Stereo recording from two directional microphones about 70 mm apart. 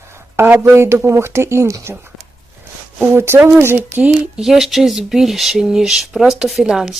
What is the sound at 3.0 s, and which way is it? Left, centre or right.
Speech, right.